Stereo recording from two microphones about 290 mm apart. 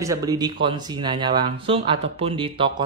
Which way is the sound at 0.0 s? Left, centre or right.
Centre.